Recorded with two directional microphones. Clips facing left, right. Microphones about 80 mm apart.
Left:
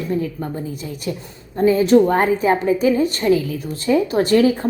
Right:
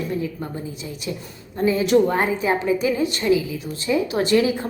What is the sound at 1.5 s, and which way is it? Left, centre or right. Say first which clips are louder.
A woman's voice: left 4 dB; left.